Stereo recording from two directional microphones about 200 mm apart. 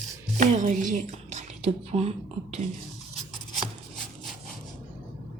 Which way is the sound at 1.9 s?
30° right (ahead or behind).